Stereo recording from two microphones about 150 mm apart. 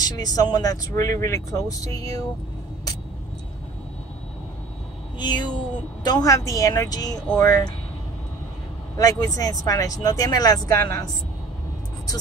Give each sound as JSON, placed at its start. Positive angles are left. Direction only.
{"t": 0.0, "sound": "speech", "side_deg": 25}
{"t": 5.2, "sound": "speech", "side_deg": 30}
{"t": 8.9, "sound": "speech", "side_deg": 25}